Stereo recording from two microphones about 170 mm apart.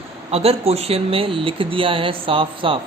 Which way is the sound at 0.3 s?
35° right (ahead or behind).